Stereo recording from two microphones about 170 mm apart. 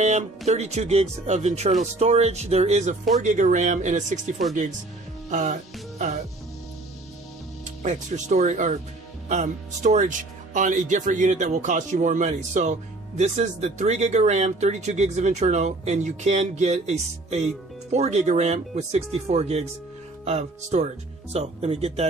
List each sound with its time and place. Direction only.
0.5 s speech: 40° right (ahead or behind)
5.3 s speech: 45° right (ahead or behind)
7.8 s speech: 45° right (ahead or behind)